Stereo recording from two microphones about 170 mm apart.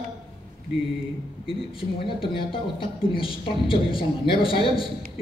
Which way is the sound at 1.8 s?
30° left (ahead or behind).